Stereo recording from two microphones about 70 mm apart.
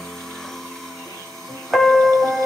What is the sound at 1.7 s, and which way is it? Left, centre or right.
Music, centre.